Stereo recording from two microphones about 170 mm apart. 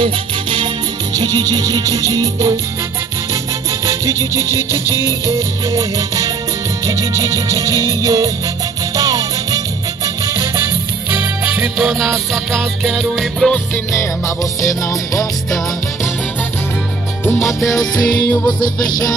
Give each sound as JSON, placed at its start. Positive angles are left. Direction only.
{"t": 0.0, "sound": "music", "side_deg": -30}
{"t": 3.8, "sound": "music", "side_deg": -20}
{"t": 13.9, "sound": "music", "side_deg": 20}
{"t": 17.2, "sound": "music", "side_deg": 15}